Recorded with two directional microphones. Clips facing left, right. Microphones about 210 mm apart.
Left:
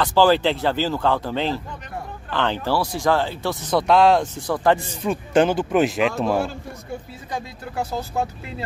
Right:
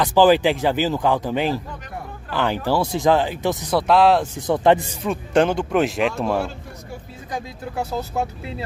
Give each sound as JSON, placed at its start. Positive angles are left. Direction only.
{"t": 0.0, "sound": "speech", "side_deg": -15}
{"t": 3.7, "sound": "speech", "side_deg": 0}
{"t": 4.4, "sound": "speech", "side_deg": -20}
{"t": 5.0, "sound": "speech", "side_deg": 0}